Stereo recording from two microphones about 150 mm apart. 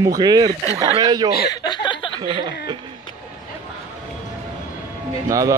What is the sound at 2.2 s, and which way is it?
Speech, 30° right (ahead or behind).